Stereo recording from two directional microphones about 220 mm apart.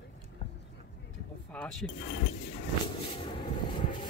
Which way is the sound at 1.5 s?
5° left (ahead or behind).